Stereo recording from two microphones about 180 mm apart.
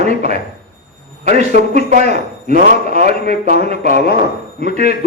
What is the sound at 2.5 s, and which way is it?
A man's voice, 40° right (ahead or behind).